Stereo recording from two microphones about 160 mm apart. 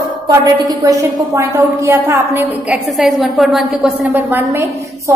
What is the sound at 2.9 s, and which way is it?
A woman's voice, centre (ahead or behind).